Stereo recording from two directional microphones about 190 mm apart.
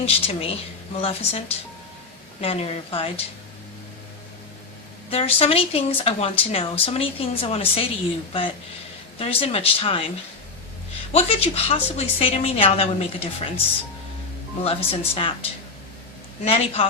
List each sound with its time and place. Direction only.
0.0 s a woman's voice: 30° left (ahead or behind)
2.4 s a woman's voice: 30° left (ahead or behind)
5.1 s speech: 30° left (ahead or behind)
11.1 s a woman's voice: 30° left (ahead or behind)
14.6 s a woman's voice: 30° left (ahead or behind)
16.4 s a woman's voice: 35° left (ahead or behind)